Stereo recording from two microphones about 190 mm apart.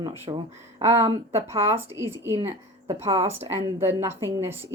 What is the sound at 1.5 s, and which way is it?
A woman's voice, 15° right (ahead or behind).